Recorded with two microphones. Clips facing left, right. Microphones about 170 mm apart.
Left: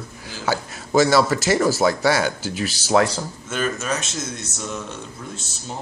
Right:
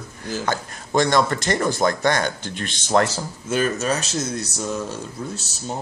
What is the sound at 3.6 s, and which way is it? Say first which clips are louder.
Speech: right 2 dB; 35° right (ahead or behind).